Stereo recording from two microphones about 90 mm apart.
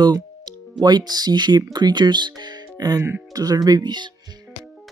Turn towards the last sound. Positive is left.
turn(degrees=-55)  # may be behind; listen again after turning